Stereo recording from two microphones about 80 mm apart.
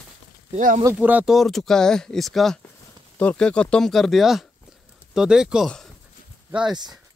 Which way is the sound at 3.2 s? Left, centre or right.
Centre.